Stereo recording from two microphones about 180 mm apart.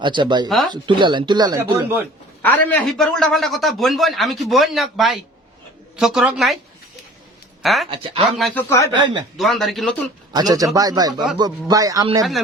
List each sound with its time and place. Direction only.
0.0 s speech: 25° right (ahead or behind)
0.4 s a man's voice: centre (ahead or behind)
0.7 s speech: 25° right (ahead or behind)
2.4 s a man's voice: 10° left (ahead or behind)
7.6 s speech: centre (ahead or behind)
7.9 s speech: 30° right (ahead or behind)
8.2 s a man's voice: centre (ahead or behind)
9.0 s speech: 25° right (ahead or behind)
9.4 s a man's voice: centre (ahead or behind)
10.3 s speech: 20° right (ahead or behind)